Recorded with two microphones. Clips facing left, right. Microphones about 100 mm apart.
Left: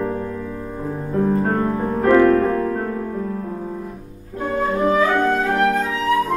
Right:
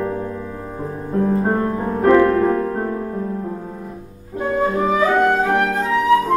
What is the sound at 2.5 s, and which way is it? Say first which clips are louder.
Music: right 1 dB; 20° right (ahead or behind).